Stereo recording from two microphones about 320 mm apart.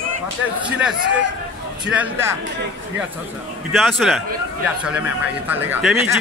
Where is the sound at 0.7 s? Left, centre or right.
Centre.